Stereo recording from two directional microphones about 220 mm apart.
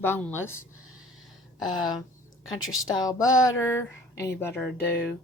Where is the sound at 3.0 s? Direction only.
15° left (ahead or behind).